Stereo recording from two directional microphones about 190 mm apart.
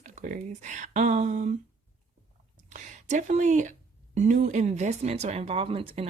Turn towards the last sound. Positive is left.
turn(degrees=-30)  # may be behind; listen again after turning